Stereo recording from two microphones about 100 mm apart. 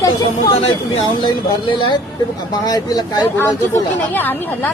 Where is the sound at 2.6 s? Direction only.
40° left (ahead or behind).